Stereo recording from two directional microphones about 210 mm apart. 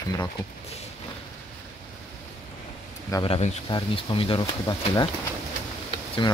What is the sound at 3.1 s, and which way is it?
Speech, 25° left (ahead or behind).